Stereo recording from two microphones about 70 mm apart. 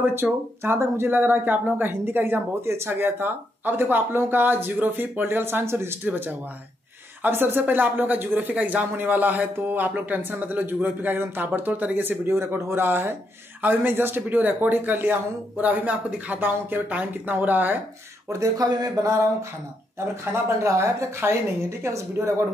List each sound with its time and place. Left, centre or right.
0.1 s speech: right
18.3 s speech: right
19.0 s a sound: right
20.6 s speech: right